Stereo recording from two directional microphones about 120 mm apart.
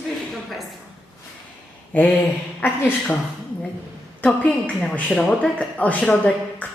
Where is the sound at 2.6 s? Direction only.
15° left (ahead or behind).